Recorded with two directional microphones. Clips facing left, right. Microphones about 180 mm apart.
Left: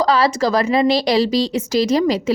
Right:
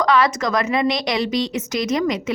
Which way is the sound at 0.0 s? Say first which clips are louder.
Left 2 dB; 30° left (ahead or behind).